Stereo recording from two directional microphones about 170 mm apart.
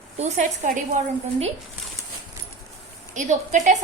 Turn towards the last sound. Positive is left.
turn(degrees=-45)  # may be behind; listen again after turning